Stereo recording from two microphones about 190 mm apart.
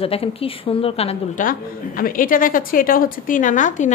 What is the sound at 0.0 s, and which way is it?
A woman's voice, 30° left (ahead or behind).